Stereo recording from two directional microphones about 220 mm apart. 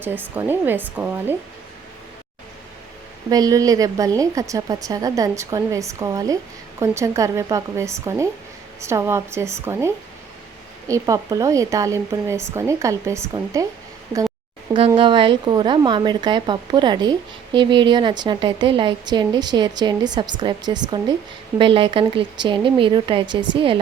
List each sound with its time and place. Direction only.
0.0 s a woman's voice: 10° right (ahead or behind)
3.2 s a woman's voice: 15° right (ahead or behind)
14.7 s a woman's voice: 25° right (ahead or behind)